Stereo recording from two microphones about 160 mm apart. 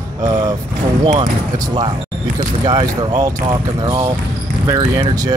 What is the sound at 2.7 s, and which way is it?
Speech, 25° right (ahead or behind).